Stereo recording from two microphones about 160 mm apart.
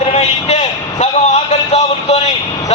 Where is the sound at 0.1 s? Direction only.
45° left (ahead or behind).